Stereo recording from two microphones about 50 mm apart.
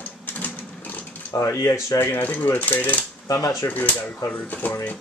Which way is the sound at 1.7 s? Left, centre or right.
Left.